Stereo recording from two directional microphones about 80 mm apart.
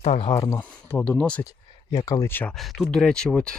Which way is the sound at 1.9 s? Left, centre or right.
Left.